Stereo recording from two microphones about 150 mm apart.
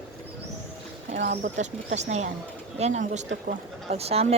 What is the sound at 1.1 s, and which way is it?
Speech, 55° right (ahead or behind).